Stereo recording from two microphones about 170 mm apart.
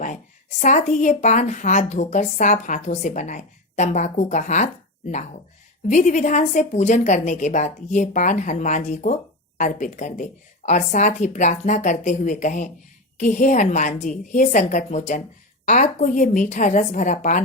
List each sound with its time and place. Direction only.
0.6 s a woman's voice: 45° left (ahead or behind)